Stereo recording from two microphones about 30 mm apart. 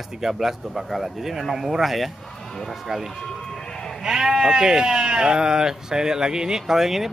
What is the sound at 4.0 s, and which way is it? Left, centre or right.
Speech, right.